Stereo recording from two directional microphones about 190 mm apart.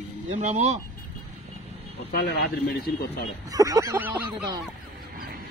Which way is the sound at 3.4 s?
20° right (ahead or behind).